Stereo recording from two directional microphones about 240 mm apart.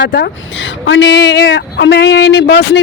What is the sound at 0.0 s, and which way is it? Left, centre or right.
Speech, left.